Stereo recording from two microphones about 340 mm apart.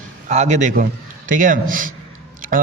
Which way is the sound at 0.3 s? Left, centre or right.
Centre.